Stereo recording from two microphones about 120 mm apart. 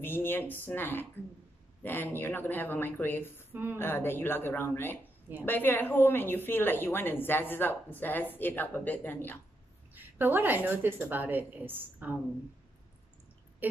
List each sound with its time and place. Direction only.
0.0 s a woman's voice: 20° left (ahead or behind)
9.9 s a woman's voice: 15° right (ahead or behind)